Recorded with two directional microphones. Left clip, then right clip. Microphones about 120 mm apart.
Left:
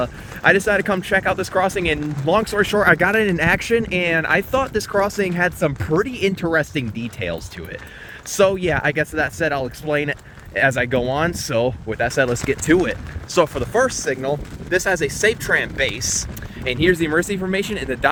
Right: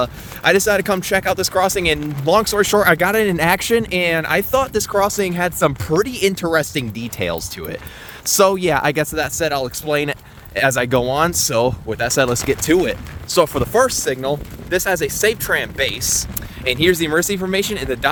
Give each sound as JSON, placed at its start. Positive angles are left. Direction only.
{"t": 0.0, "sound": "speech", "side_deg": -55}
{"t": 4.9, "sound": "speech", "side_deg": -35}
{"t": 6.0, "sound": "speech", "side_deg": -60}